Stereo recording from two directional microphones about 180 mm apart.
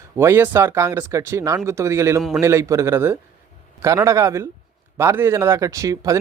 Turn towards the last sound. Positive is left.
turn(degrees=-20)  # may be behind; listen again after turning